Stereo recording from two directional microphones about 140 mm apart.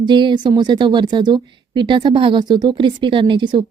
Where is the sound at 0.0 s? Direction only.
35° right (ahead or behind).